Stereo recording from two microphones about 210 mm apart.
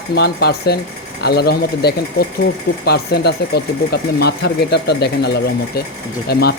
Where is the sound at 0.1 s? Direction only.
50° left (ahead or behind).